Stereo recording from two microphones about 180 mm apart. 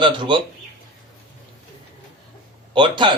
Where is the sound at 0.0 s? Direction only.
25° right (ahead or behind).